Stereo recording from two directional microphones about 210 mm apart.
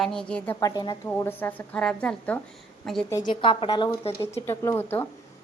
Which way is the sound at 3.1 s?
20° left (ahead or behind).